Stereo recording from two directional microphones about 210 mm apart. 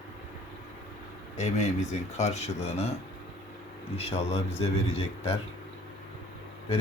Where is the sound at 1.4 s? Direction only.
35° left (ahead or behind).